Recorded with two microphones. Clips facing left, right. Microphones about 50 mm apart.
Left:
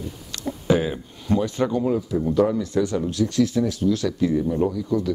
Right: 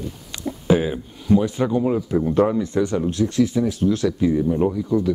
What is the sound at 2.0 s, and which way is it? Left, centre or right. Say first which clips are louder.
Speech: right 2 dB; right.